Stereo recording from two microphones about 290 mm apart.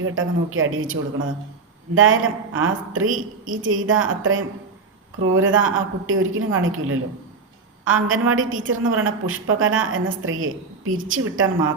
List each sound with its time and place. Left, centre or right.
0.0 s a woman's voice: right